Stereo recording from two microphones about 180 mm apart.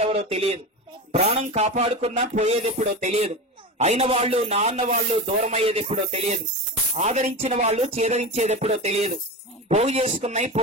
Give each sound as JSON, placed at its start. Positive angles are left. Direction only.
{"t": 0.0, "sound": "speech", "side_deg": -35}